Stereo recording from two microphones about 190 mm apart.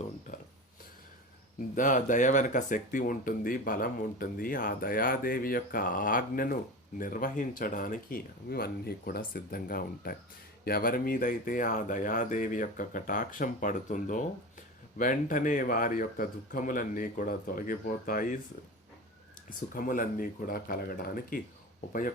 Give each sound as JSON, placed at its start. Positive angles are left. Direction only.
{"t": 1.7, "sound": "speech", "side_deg": 45}
{"t": 19.5, "sound": "speech", "side_deg": 45}